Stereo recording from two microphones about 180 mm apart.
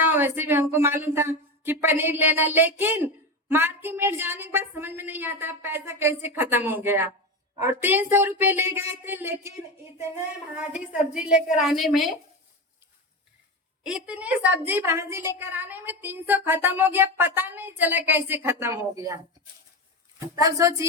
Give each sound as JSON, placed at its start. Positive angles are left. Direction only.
{"t": 0.0, "sound": "music", "side_deg": -10}
{"t": 10.6, "sound": "a woman's voice", "side_deg": -5}
{"t": 13.8, "sound": "music", "side_deg": -5}